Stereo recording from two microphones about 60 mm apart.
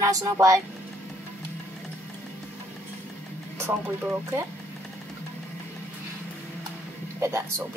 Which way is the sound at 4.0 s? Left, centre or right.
Right.